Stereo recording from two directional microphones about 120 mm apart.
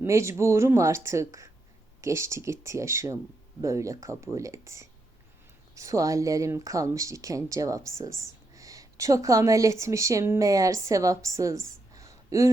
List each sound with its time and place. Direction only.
0.0 s speech: 25° right (ahead or behind)